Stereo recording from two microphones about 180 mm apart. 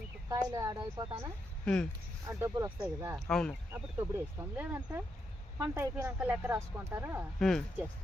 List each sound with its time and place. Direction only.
0.4 s speech: 20° right (ahead or behind)
1.0 s speech: 30° right (ahead or behind)
1.6 s speech: 5° left (ahead or behind)
2.2 s speech: 15° right (ahead or behind)
3.2 s speech: 5° left (ahead or behind)
3.7 s speech: 15° right (ahead or behind)
7.3 s speech: 5° left (ahead or behind)